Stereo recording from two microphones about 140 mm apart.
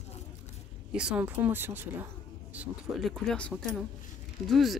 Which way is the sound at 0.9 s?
10° right (ahead or behind).